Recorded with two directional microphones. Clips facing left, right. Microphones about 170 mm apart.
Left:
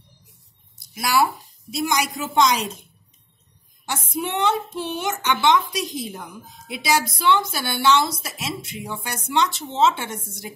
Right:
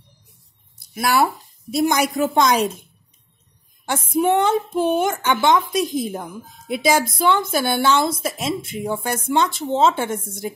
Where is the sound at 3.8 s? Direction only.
50° right (ahead or behind).